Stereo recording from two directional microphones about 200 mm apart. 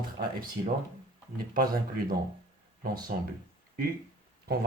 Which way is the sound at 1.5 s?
45° right (ahead or behind).